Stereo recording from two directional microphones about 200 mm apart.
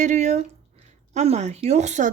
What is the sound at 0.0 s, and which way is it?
Speech, 35° right (ahead or behind).